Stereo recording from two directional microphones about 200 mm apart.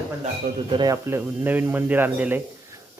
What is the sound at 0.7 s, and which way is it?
Speech, 20° right (ahead or behind).